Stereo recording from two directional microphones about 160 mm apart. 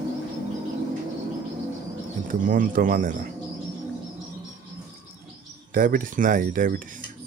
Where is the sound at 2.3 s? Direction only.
55° right (ahead or behind).